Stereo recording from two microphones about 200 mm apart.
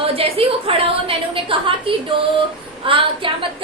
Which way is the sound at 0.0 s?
30° right (ahead or behind).